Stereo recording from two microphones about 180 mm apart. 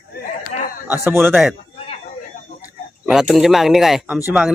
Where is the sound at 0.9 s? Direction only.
10° right (ahead or behind).